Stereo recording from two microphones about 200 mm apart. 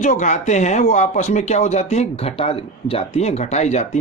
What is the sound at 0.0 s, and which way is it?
A man's voice, 35° left (ahead or behind).